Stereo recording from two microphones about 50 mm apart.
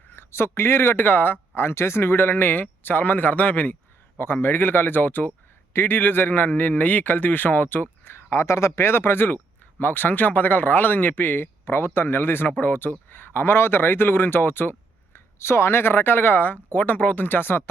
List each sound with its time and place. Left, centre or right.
0.1 s speech: left
4.2 s a man's voice: left
11.6 s speech: left
15.4 s speech: left